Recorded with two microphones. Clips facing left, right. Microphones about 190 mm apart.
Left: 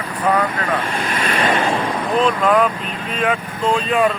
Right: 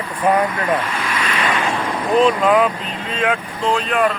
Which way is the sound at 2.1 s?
Centre (ahead or behind).